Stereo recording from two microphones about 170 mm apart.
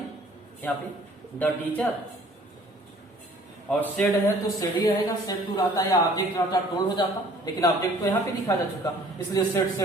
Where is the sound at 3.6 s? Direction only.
10° left (ahead or behind).